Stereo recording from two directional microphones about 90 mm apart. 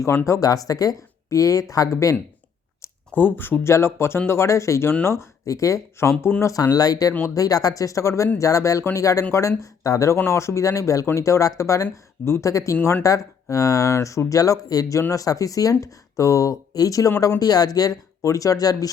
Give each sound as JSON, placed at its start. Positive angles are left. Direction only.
{"t": 0.0, "sound": "speech", "side_deg": 30}
{"t": 0.3, "sound": "speech", "side_deg": 40}
{"t": 2.8, "sound": "speech", "side_deg": 25}
{"t": 6.4, "sound": "speech", "side_deg": 40}